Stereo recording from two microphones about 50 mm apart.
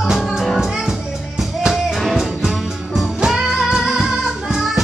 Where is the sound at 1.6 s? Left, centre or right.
Centre.